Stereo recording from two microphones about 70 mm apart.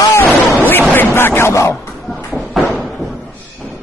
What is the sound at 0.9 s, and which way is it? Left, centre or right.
Speech, left.